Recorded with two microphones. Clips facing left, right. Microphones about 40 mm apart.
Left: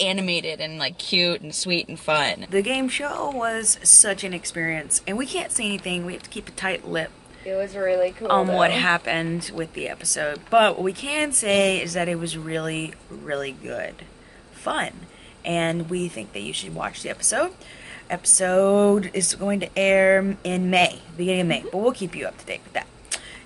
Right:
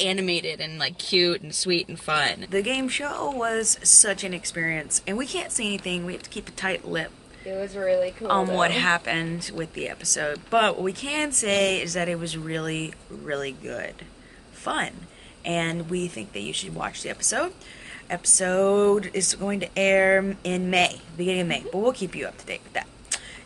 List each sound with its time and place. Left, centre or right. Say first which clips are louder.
0.0 s speech: left 1 dB; centre
1.2 s speech: right 1 dB; left
2.5 s speech: left 5 dB; centre
7.5 s speech: left 3 dB; left
8.2 s speech: left 3 dB; centre